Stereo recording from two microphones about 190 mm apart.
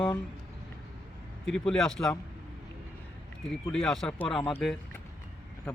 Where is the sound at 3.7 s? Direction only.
5° left (ahead or behind).